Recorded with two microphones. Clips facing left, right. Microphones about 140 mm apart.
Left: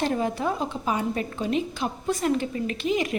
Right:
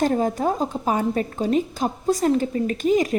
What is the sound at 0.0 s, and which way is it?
A woman's voice, 40° right (ahead or behind).